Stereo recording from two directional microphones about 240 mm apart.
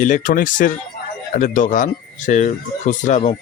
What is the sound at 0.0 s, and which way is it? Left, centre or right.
Speech, left.